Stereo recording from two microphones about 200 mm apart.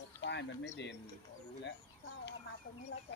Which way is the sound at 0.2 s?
60° left (ahead or behind).